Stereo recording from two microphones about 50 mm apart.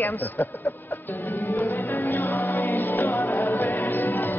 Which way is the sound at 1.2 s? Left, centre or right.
Left.